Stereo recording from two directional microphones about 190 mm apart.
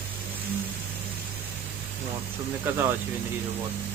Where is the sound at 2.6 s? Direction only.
10° right (ahead or behind).